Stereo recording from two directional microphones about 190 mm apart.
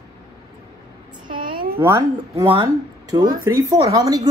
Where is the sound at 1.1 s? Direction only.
25° right (ahead or behind).